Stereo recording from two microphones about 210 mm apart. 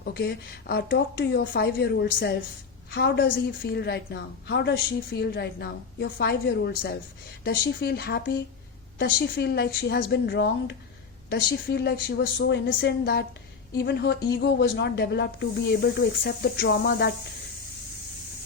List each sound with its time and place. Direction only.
0.0 s a woman's voice: 50° left (ahead or behind)
12.4 s a woman's voice: 60° left (ahead or behind)